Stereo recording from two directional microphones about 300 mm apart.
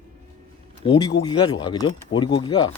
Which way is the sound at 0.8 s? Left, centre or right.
Centre.